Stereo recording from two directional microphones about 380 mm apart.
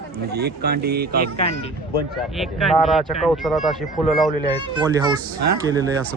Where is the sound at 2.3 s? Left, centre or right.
Centre.